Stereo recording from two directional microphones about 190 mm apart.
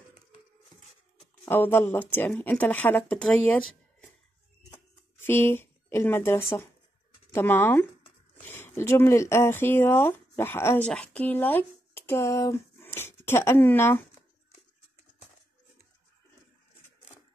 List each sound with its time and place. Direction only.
1.4 s speech: 10° left (ahead or behind)
5.2 s speech: 10° left (ahead or behind)